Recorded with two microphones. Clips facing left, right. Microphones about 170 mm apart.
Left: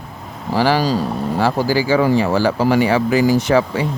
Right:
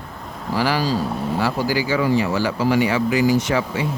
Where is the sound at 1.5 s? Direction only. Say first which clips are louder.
Left 7 dB; 35° left (ahead or behind).